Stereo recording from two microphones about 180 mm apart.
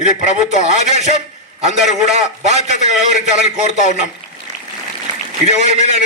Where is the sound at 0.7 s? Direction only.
40° right (ahead or behind).